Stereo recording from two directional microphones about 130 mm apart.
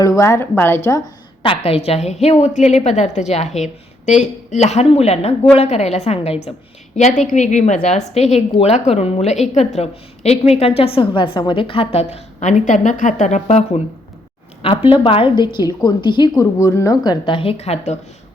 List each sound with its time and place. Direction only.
0.2 s a woman's voice: 20° left (ahead or behind)
1.4 s a woman's voice: 45° left (ahead or behind)
6.9 s a woman's voice: 65° left (ahead or behind)
14.6 s a woman's voice: 45° left (ahead or behind)